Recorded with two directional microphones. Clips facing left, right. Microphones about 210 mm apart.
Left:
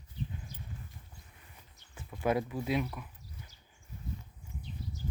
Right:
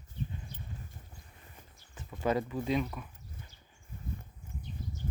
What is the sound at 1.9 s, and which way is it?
Speech, 10° left (ahead or behind).